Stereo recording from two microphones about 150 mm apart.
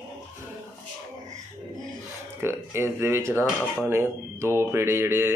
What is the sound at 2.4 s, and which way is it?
Speech, 15° right (ahead or behind).